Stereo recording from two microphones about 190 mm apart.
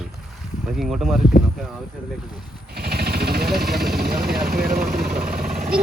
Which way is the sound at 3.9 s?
55° right (ahead or behind).